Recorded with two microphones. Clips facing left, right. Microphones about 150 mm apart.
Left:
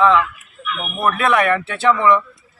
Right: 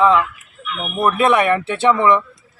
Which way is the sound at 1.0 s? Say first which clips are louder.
Right 2 dB; 10° right (ahead or behind).